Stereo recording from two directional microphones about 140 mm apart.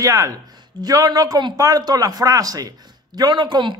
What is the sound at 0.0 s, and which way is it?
Speech, 25° right (ahead or behind).